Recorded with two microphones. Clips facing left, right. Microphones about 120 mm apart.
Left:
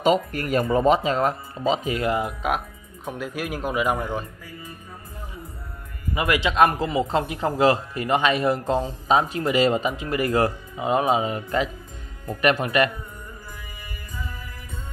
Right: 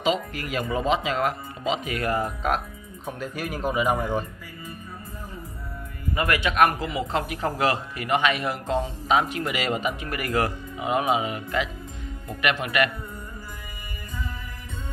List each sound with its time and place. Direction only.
0.0 s a man's voice: 45° left (ahead or behind); by 4.2 s centre (ahead or behind)
6.1 s a man's voice: 20° left (ahead or behind)